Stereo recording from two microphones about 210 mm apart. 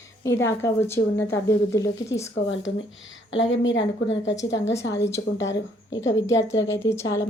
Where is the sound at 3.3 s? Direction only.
60° left (ahead or behind).